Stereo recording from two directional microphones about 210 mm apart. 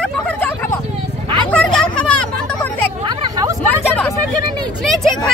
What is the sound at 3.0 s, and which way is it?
Hubbub, 20° right (ahead or behind).